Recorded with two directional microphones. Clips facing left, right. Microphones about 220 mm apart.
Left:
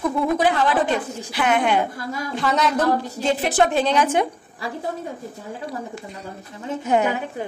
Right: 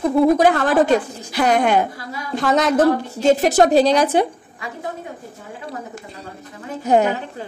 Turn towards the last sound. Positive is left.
turn(degrees=-35)  # may be behind; listen again after turning